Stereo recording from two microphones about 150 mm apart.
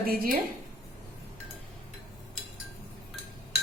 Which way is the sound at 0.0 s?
75° right (ahead or behind).